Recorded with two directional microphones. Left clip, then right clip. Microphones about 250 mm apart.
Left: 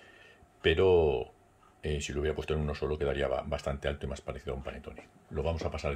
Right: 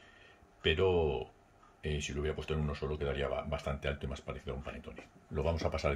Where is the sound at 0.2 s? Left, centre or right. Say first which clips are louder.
Left 5 dB; centre.